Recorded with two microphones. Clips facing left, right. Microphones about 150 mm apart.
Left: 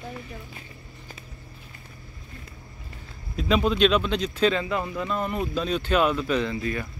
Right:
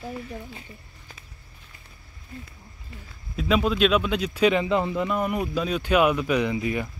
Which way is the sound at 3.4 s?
5° right (ahead or behind).